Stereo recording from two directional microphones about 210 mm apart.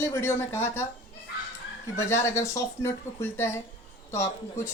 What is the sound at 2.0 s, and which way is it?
A woman's voice, 15° left (ahead or behind).